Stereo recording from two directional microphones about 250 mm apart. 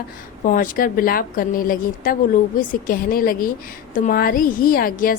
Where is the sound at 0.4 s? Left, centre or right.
Left.